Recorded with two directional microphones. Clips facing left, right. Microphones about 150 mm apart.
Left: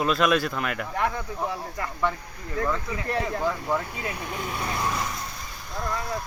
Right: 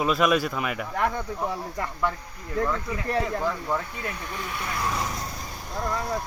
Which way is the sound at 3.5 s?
5° left (ahead or behind).